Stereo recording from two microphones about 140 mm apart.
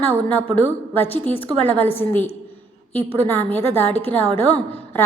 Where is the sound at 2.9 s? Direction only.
15° left (ahead or behind).